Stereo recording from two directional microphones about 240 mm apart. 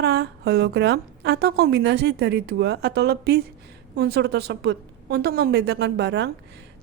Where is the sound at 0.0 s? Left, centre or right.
Right.